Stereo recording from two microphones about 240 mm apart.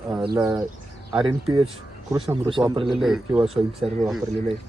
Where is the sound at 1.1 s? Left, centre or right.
Centre.